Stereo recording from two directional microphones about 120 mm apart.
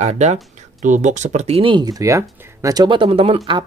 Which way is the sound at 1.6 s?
40° right (ahead or behind).